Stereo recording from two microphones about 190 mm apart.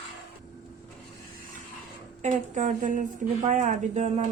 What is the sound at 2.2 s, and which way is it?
A woman's voice, 40° right (ahead or behind).